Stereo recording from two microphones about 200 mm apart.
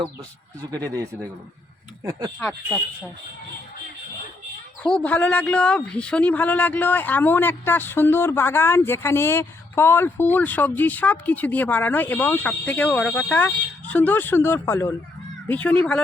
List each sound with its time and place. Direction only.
0.6 s speech: 20° right (ahead or behind)
2.4 s speech: 5° left (ahead or behind)
4.8 s a woman's voice: 5° left (ahead or behind)